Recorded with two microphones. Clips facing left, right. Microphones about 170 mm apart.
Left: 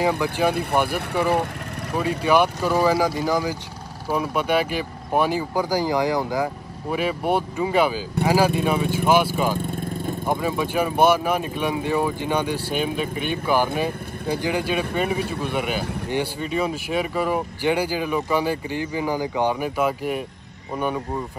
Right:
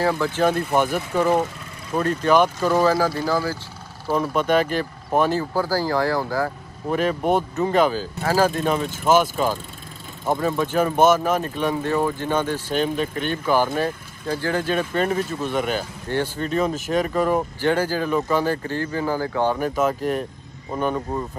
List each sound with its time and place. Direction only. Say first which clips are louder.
0.0 s speech: right 1 dB; 15° left (ahead or behind)
2.0 s speech: right 1 dB; 10° left (ahead or behind)
9.6 s vehicle: left 12 dB; 55° left (ahead or behind)
10.2 s speech: right 3 dB; 10° left (ahead or behind)